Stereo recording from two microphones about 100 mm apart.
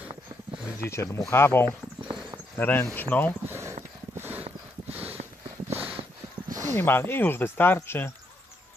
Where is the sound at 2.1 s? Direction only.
10° right (ahead or behind).